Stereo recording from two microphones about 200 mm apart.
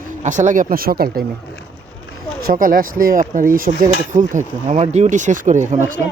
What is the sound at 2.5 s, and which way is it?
Speech, 45° right (ahead or behind).